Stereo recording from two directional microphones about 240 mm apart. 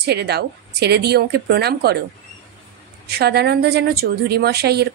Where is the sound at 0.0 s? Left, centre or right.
Right.